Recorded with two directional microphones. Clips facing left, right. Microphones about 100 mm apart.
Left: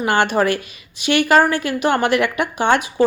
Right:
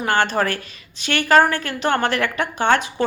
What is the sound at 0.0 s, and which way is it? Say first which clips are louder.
A woman's voice: left 3 dB; 15° left (ahead or behind).